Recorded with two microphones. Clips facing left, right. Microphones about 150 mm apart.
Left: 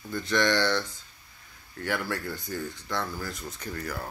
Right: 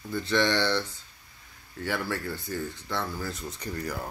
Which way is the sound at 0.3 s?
5° right (ahead or behind).